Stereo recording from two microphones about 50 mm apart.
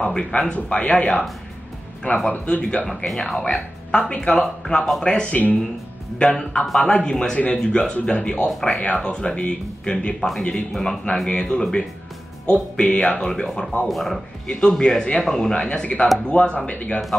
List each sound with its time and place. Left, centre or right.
0.0 s speech: centre
2.4 s a man's voice: centre
5.3 s a man's voice: left
10.7 s a man's voice: centre
13.8 s speech: centre
14.5 s a man's voice: centre